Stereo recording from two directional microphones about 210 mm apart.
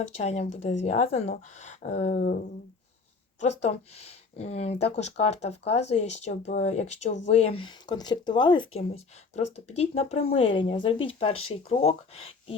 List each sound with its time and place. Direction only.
0.2 s speech: 30° left (ahead or behind)
3.4 s speech: 30° left (ahead or behind)